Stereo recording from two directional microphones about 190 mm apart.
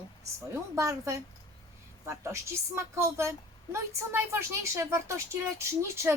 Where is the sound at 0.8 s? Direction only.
15° right (ahead or behind).